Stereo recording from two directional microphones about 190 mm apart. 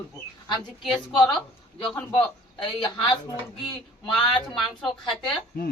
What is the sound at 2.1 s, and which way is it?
Speech, 25° left (ahead or behind).